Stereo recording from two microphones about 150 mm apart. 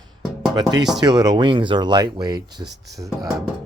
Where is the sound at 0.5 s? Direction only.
25° right (ahead or behind).